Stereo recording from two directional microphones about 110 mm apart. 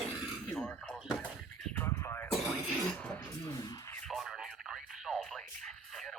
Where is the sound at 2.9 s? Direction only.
5° left (ahead or behind).